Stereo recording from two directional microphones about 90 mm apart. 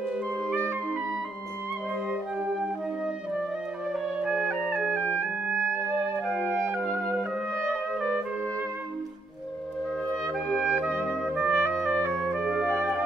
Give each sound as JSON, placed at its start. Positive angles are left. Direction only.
{"t": 4.2, "sound": "music", "side_deg": -10}
{"t": 6.1, "sound": "clarinet", "side_deg": -10}
{"t": 10.2, "sound": "music", "side_deg": 0}
{"t": 11.6, "sound": "music", "side_deg": -25}